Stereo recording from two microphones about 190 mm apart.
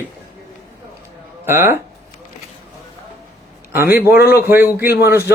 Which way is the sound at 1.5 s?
15° right (ahead or behind).